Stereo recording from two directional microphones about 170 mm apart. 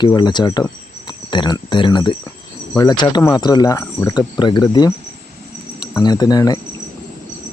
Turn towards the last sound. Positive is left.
turn(degrees=20)  # may be behind; listen again after turning